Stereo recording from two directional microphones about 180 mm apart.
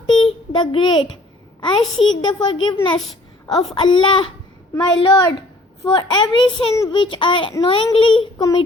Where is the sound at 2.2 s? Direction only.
25° left (ahead or behind).